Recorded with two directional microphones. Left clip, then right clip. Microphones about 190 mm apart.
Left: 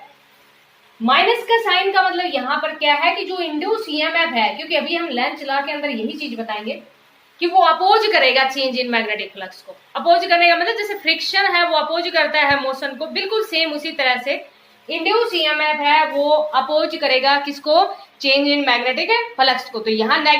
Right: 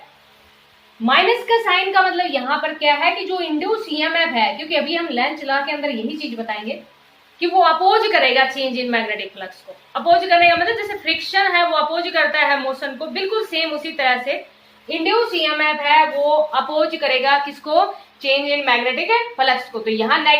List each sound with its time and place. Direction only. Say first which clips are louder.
1.0 s a woman's voice: even; 15° left (ahead or behind); by 20.3 s 35° left (ahead or behind)